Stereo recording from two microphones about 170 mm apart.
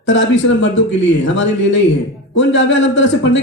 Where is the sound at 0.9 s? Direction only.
90° left.